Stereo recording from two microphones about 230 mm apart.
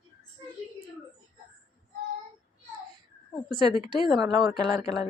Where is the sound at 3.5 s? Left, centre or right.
Right.